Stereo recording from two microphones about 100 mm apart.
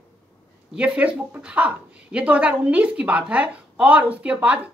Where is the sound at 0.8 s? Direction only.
15° right (ahead or behind).